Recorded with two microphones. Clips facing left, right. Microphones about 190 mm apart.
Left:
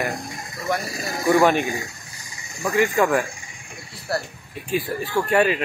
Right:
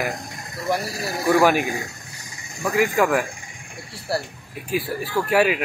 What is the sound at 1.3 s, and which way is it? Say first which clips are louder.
Speech: even; 5° right (ahead or behind).